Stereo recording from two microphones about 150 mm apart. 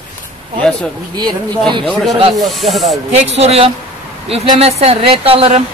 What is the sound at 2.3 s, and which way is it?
Speech, centre (ahead or behind).